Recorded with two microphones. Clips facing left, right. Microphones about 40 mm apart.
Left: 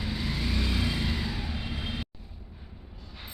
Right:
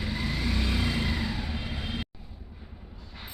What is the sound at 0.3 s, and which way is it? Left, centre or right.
Vehicle, centre.